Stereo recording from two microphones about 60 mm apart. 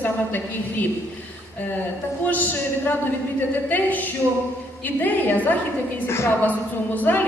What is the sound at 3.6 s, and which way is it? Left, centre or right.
A woman's voice, left.